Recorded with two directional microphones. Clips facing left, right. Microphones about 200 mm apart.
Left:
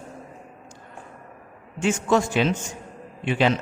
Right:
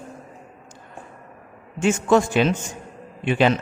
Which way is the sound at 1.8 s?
55° right (ahead or behind).